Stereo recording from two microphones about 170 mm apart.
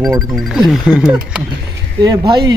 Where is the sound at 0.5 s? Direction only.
5° right (ahead or behind).